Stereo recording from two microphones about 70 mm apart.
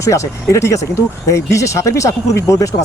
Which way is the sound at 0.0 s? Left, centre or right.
Left.